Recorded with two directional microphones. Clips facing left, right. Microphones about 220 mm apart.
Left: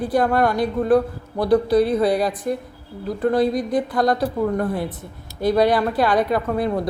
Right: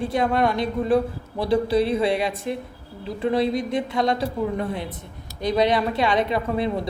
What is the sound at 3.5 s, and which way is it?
Speech, 25° right (ahead or behind).